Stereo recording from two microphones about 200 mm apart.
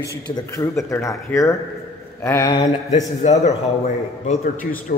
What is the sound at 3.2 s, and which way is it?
Speech, 35° left (ahead or behind).